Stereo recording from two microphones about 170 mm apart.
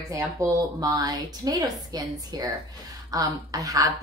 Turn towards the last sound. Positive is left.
turn(degrees=-20)  # may be behind; listen again after turning